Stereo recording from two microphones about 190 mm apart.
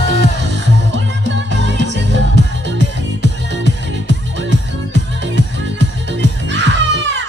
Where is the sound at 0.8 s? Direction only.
70° right (ahead or behind).